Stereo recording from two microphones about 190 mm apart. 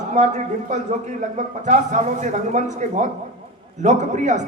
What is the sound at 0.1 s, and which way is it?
A man's voice, 40° right (ahead or behind).